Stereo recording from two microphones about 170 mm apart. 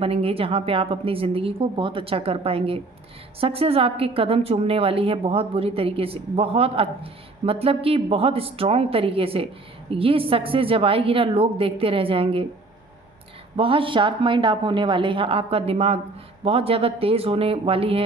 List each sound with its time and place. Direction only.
0.0 s a woman's voice: 35° right (ahead or behind)
13.6 s a woman's voice: 30° right (ahead or behind)